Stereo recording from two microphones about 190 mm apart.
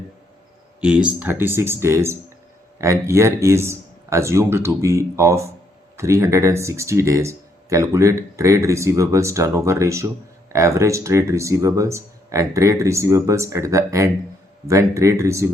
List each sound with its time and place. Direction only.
0.8 s speech: 5° right (ahead or behind)